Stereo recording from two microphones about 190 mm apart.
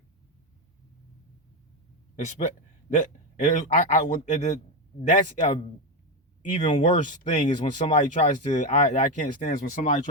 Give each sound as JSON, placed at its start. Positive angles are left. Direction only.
{"t": 2.9, "sound": "a man's voice", "side_deg": 40}
{"t": 6.7, "sound": "speech", "side_deg": 40}
{"t": 7.5, "sound": "speech", "side_deg": 25}
{"t": 7.9, "sound": "speech", "side_deg": 40}